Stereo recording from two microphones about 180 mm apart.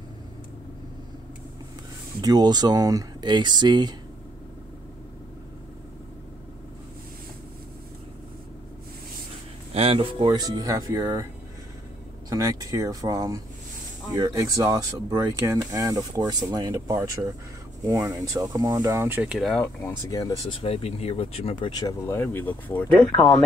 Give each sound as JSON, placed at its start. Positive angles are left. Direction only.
{"t": 2.2, "sound": "speech", "side_deg": -20}
{"t": 9.8, "sound": "speech", "side_deg": -30}
{"t": 12.3, "sound": "speech", "side_deg": -20}
{"t": 20.1, "sound": "speech", "side_deg": 20}
{"t": 20.6, "sound": "speech", "side_deg": 35}